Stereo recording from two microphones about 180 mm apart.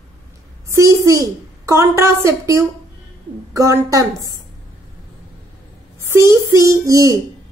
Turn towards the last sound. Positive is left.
turn(degrees=-20)  # may be behind; listen again after turning